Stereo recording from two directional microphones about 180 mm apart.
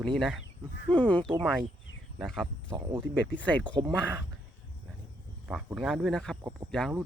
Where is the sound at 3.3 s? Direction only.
5° left (ahead or behind).